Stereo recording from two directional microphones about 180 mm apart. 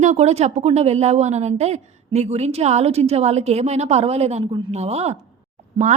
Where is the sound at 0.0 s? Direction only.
40° right (ahead or behind).